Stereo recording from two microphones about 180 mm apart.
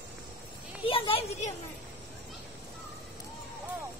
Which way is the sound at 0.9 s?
30° left (ahead or behind).